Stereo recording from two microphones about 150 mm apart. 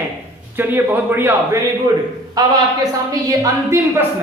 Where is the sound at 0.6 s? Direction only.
15° right (ahead or behind).